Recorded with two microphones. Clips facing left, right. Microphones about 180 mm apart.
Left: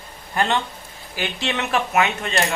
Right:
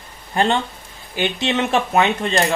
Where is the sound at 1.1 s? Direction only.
20° right (ahead or behind).